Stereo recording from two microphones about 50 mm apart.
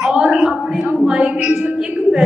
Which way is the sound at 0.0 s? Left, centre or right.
Centre.